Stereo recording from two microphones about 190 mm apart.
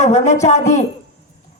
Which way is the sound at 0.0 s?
35° left (ahead or behind).